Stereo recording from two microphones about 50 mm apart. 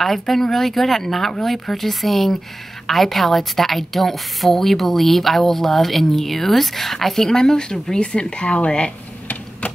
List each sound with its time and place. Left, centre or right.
0.0 s a woman's voice: centre; by 8.9 s left